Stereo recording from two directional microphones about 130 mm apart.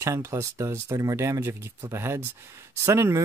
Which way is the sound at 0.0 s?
20° right (ahead or behind).